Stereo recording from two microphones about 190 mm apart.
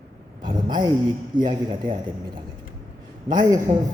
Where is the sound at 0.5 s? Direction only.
20° right (ahead or behind).